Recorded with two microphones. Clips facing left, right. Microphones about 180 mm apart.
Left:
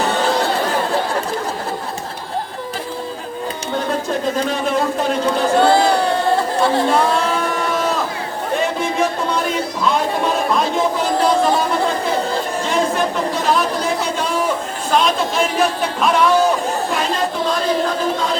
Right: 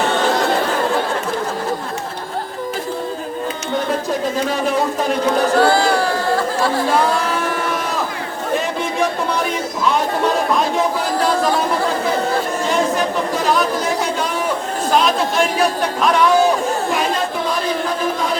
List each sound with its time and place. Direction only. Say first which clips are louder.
5.5 s chatter: left 3 dB; 20° left (ahead or behind)
14.9 s chatter: even; centre (ahead or behind)
16.0 s a man's voice: even; centre (ahead or behind)